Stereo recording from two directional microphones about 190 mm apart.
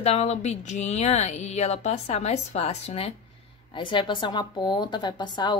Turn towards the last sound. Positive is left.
turn(degrees=25)  # may be behind; listen again after turning